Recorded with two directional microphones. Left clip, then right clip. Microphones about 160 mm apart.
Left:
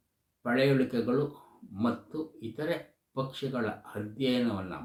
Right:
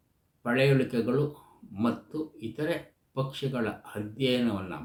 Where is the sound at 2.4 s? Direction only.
15° right (ahead or behind).